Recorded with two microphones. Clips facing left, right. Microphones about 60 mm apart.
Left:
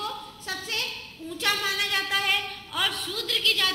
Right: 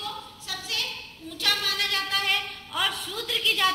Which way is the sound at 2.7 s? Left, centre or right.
Centre.